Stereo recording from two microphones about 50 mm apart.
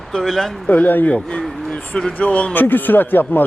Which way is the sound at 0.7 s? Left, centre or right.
Left.